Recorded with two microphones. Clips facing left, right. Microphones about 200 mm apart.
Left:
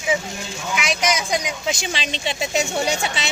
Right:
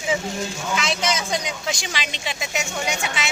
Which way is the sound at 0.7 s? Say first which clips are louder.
Left 2 dB; 15° left (ahead or behind).